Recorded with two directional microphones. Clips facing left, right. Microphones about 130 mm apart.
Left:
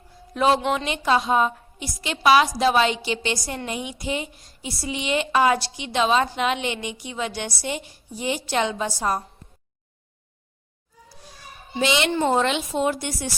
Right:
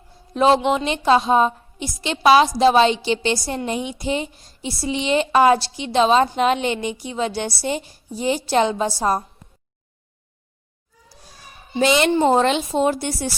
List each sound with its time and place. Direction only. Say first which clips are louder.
0.3 s a woman's voice: right 4 dB; 25° right (ahead or behind)
11.8 s a woman's voice: right 5 dB; 45° right (ahead or behind)
12.1 s speech: right 5 dB; 30° right (ahead or behind)